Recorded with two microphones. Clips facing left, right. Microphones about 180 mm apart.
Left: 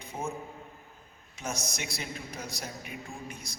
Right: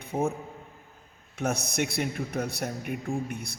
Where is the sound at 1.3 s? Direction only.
60° right (ahead or behind).